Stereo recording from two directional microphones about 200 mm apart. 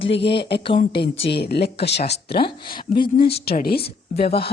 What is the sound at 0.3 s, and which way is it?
Speech, 25° left (ahead or behind).